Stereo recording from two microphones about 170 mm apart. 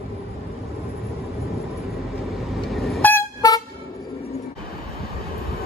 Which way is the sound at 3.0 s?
15° left (ahead or behind).